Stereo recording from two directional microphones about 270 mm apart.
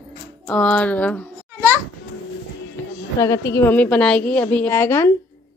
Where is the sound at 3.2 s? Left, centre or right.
Centre.